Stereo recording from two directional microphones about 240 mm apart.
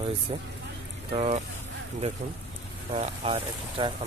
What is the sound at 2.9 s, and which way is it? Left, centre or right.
Speech, right.